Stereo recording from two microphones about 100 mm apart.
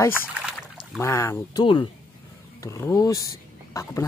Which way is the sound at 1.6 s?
60° left (ahead or behind).